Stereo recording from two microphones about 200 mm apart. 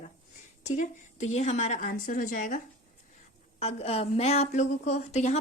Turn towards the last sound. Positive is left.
turn(degrees=35)  # may be behind; listen again after turning